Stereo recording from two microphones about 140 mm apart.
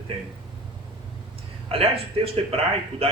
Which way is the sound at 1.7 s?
45° right (ahead or behind).